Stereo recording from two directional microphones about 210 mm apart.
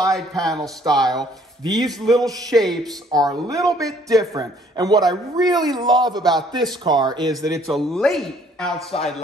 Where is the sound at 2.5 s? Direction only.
Centre (ahead or behind).